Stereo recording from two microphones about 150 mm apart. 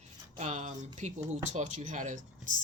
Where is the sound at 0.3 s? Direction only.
55° right (ahead or behind).